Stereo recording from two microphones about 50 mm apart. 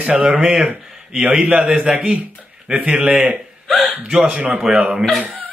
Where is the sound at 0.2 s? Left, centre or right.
Centre.